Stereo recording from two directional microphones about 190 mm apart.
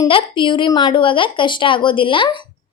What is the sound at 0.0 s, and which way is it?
A woman's voice, 25° left (ahead or behind).